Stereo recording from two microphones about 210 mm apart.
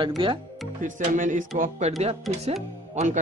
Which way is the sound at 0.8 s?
35° right (ahead or behind).